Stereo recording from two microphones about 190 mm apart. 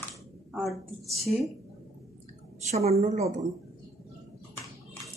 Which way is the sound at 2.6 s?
35° right (ahead or behind).